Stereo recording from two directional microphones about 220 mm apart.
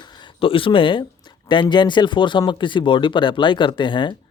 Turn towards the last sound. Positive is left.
turn(degrees=20)  # may be behind; listen again after turning